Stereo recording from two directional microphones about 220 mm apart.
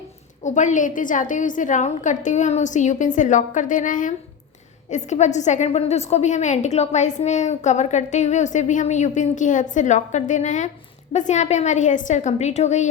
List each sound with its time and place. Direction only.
0.4 s a woman's voice: 35° left (ahead or behind)